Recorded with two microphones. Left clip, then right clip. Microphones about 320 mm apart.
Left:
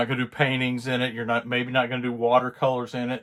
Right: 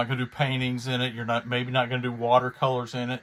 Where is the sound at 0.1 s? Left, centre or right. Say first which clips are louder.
Left 4 dB; centre.